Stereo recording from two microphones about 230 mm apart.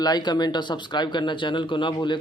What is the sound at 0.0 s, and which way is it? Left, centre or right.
Speech, centre.